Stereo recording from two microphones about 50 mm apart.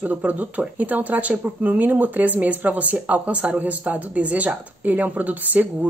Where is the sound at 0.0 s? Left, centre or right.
Right.